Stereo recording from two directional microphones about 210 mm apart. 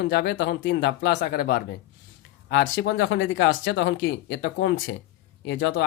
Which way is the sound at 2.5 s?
60° left (ahead or behind).